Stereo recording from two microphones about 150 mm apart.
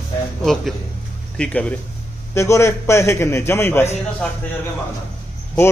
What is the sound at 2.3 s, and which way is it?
A man's voice, 20° left (ahead or behind).